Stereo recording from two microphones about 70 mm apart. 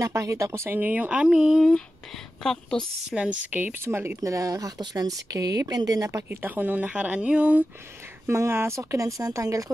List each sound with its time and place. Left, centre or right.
0.0 s speech: right
0.7 s speech: right
1.3 s speech: centre
2.4 s a woman's voice: centre
3.1 s speech: centre; by 4.1 s right
4.2 s speech: right
6.4 s speech: right
8.3 s speech: right